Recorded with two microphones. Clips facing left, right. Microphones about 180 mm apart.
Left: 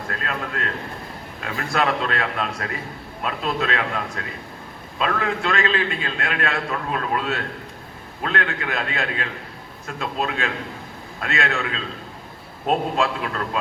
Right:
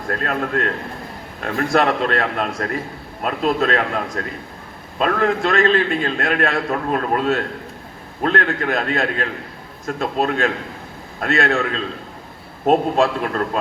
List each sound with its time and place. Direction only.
0.1 s a man's voice: 50° right (ahead or behind)